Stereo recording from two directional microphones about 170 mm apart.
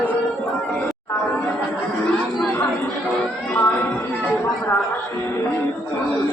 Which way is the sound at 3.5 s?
10° left (ahead or behind).